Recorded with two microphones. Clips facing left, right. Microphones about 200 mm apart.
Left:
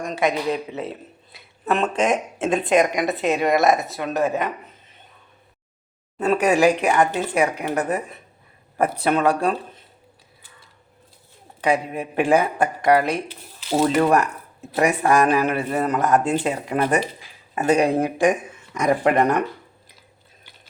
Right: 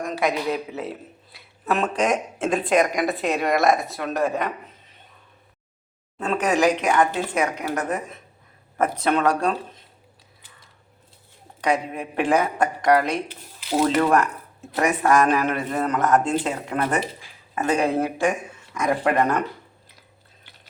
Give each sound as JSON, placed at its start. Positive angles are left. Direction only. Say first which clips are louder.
{"t": 0.0, "sound": "a man's voice", "louder": "left 2 dB", "side_deg": 0}
{"t": 6.1, "sound": "a man's voice", "louder": "left 4 dB", "side_deg": 10}
{"t": 11.6, "sound": "a man's voice", "louder": "left 2 dB", "side_deg": 5}